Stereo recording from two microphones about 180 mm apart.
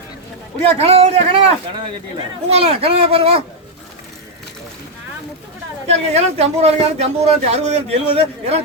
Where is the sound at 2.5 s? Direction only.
35° right (ahead or behind).